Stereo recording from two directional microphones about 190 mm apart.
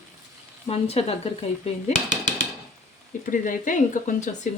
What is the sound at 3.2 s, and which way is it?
Speech, 45° left (ahead or behind).